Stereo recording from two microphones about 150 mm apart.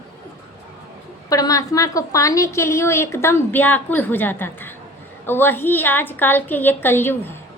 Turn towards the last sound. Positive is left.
turn(degrees=15)  # may be behind; listen again after turning